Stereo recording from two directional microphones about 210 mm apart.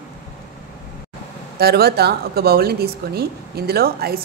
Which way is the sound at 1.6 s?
50° right (ahead or behind).